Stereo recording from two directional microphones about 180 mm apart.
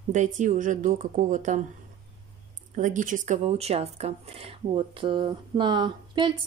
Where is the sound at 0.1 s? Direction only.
45° right (ahead or behind).